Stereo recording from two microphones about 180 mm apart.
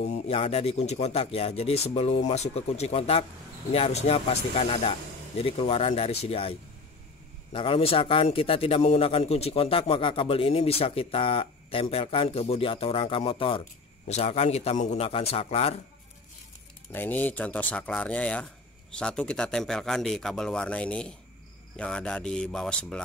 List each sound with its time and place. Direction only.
0.0 s a man's voice: 35° left (ahead or behind)
7.5 s a man's voice: 30° left (ahead or behind)
16.9 s speech: 10° left (ahead or behind)